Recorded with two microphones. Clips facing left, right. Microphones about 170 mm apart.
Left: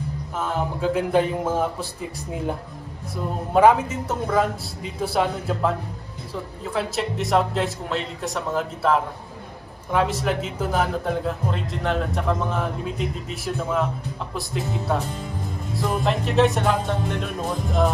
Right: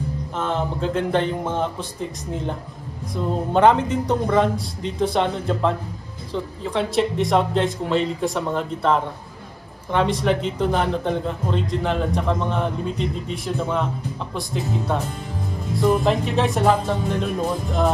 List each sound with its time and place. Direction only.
0.4 s speech: 5° left (ahead or behind)
3.5 s speech: 5° left (ahead or behind)